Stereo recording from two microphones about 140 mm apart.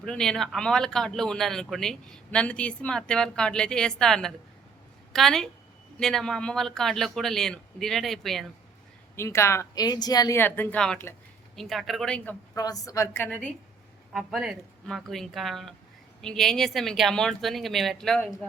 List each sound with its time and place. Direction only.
0.0 s a man's voice: 5° left (ahead or behind)
9.1 s speech: 20° left (ahead or behind)
10.3 s a man's voice: 15° left (ahead or behind)
12.5 s speech: 25° left (ahead or behind)
14.1 s a man's voice: centre (ahead or behind)